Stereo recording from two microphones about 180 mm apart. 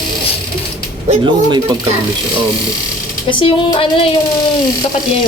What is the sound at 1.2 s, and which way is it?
Speech, 25° right (ahead or behind).